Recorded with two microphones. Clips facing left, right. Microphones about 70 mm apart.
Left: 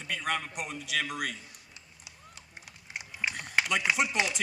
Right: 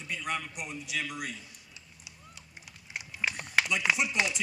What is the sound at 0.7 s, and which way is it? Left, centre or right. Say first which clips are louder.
Speech: left 4 dB; left.